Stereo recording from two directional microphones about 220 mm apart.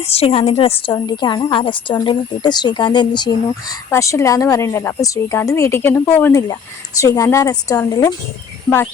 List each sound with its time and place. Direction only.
0.1 s a woman's voice: 25° left (ahead or behind)